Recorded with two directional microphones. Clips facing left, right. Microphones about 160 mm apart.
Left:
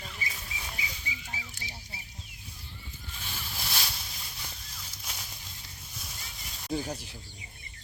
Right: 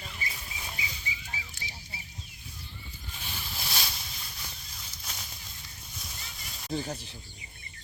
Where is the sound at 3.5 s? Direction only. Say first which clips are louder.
Even; 5° right (ahead or behind).